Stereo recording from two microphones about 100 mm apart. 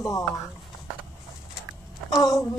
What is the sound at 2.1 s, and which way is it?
Speech, centre (ahead or behind).